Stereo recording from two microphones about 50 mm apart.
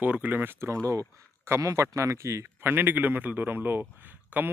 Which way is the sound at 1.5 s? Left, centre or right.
Right.